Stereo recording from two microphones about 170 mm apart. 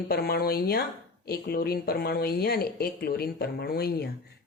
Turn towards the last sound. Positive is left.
turn(degrees=70)  # may be behind; listen again after turning